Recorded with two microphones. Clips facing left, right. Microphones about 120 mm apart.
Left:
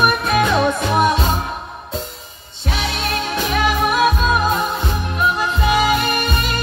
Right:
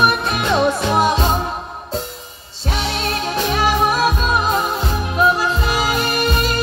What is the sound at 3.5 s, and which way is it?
Music, 35° right (ahead or behind).